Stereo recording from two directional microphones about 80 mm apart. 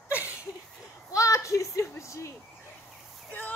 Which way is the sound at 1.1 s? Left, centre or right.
Left.